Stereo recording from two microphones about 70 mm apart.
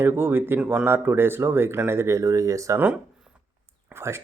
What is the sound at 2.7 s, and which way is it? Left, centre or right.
Speech, right.